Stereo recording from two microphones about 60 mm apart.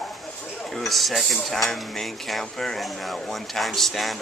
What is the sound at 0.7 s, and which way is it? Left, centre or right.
Speech, centre.